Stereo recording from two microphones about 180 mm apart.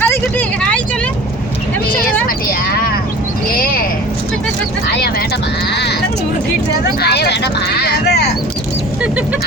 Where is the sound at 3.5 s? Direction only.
50° left (ahead or behind).